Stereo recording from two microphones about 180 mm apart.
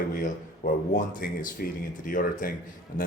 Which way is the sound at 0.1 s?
50° left (ahead or behind).